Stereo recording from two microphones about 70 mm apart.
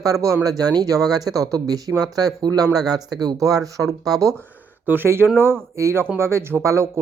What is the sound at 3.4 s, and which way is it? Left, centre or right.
Speech, right.